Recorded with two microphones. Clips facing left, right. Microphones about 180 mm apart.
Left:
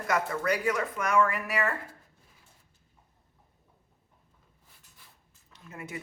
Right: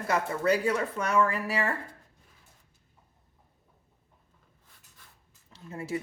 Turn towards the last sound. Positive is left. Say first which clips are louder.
# right 7 dB
turn(degrees=-30)  # may be behind; listen again after turning